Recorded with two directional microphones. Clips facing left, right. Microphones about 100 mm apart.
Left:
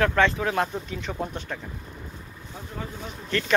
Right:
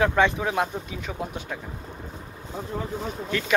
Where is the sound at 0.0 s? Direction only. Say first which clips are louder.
Even; 15° right (ahead or behind).